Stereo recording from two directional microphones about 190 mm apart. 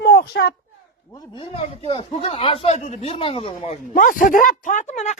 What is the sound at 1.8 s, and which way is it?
Speech, 30° left (ahead or behind).